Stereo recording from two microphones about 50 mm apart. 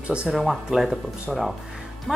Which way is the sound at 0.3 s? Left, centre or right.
Centre.